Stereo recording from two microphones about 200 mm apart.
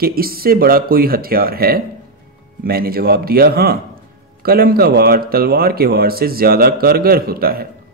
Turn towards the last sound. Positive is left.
turn(degrees=-50)  # may be behind; listen again after turning